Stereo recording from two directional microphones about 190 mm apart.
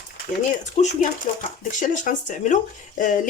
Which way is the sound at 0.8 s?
40° left (ahead or behind).